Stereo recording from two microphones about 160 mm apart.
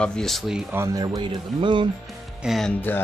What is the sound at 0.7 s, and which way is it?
Speech, 20° right (ahead or behind).